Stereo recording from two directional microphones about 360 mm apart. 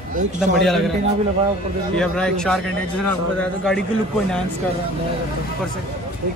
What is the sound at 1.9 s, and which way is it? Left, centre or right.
Speech, centre.